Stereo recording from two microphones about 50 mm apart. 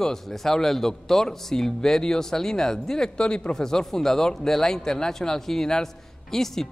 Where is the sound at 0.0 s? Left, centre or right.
Centre.